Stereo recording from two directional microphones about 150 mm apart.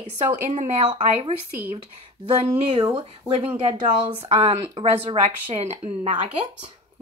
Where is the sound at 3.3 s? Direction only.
45° right (ahead or behind).